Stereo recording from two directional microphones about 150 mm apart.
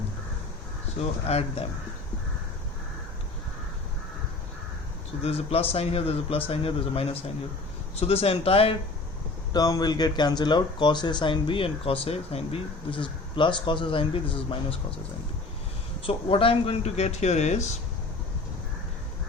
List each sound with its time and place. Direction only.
1.3 s speech: 45° left (ahead or behind)
5.2 s speech: 40° left (ahead or behind)
9.5 s speech: 25° left (ahead or behind)
16.0 s speech: 35° left (ahead or behind)